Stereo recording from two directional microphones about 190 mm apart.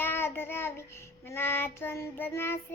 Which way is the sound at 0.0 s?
10° left (ahead or behind).